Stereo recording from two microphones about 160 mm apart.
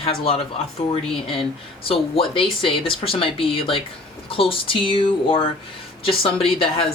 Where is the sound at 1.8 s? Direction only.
35° left (ahead or behind).